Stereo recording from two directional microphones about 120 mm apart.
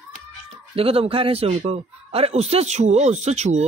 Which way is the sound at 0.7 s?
55° right (ahead or behind).